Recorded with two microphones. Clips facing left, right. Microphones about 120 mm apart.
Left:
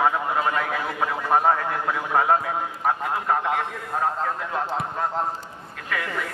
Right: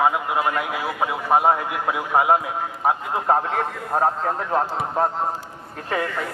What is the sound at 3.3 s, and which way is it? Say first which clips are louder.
A man's voice: right 4 dB; 40° right (ahead or behind).